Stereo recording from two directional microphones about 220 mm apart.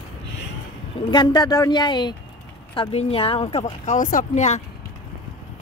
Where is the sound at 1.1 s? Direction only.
20° left (ahead or behind); by 4.6 s 35° left (ahead or behind).